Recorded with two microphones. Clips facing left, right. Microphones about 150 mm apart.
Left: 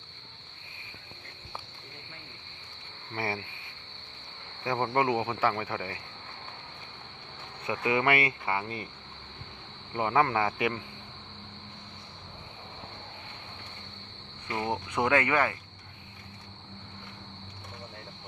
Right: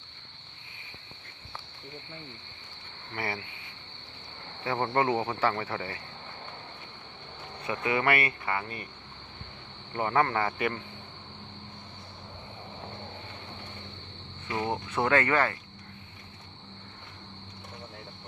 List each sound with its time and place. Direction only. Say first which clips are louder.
3.2 s cricket: left 1 dB; 25° left (ahead or behind)
4.6 s speech: even; 15° left (ahead or behind)
7.6 s cricket: left 1 dB; 20° left (ahead or behind)
9.9 s speech: left 1 dB; 10° left (ahead or behind)
14.5 s speech: right 1 dB; 15° left (ahead or behind)